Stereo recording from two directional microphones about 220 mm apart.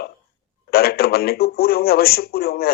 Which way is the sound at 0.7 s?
45° left (ahead or behind).